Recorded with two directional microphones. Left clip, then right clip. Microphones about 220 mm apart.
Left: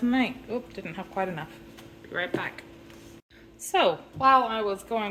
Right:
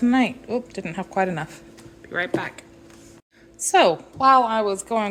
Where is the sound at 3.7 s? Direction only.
50° right (ahead or behind).